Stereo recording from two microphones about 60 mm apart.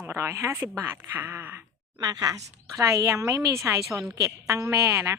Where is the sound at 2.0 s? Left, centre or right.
Right.